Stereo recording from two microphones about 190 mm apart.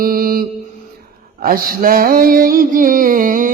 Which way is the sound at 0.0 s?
50° right (ahead or behind).